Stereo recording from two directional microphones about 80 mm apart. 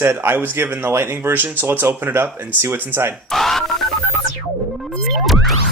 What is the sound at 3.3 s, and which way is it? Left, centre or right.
Telephone dialing, centre.